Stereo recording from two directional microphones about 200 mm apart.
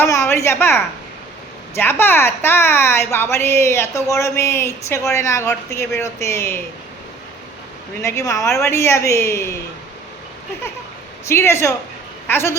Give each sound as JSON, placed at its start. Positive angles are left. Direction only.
{"t": 0.0, "sound": "a woman's voice", "side_deg": 15}
{"t": 8.0, "sound": "a woman's voice", "side_deg": 15}
{"t": 11.3, "sound": "a woman's voice", "side_deg": 15}